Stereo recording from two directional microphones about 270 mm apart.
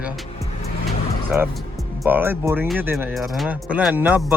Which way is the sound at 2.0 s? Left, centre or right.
Centre.